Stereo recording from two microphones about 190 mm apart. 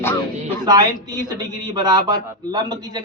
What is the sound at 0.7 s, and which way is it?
A man's voice, 20° right (ahead or behind).